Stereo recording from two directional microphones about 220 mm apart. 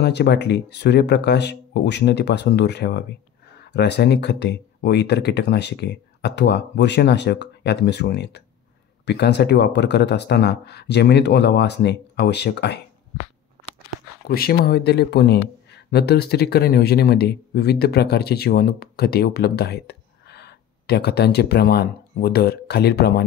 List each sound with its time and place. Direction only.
0.0 s speech: 50° left (ahead or behind)
14.2 s speech: 45° left (ahead or behind)